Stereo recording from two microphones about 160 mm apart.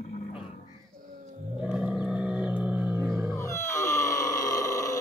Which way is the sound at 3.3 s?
20° left (ahead or behind).